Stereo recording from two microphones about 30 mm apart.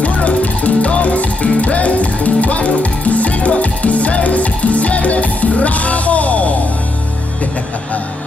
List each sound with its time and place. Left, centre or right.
0.0 s music: left